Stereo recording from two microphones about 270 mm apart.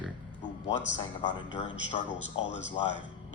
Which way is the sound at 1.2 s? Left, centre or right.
Centre.